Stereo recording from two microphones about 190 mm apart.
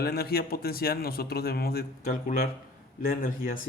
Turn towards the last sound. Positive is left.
turn(degrees=45)  # may be behind; listen again after turning